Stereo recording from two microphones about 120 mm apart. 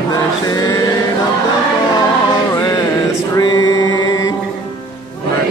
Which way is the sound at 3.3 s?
30° left (ahead or behind).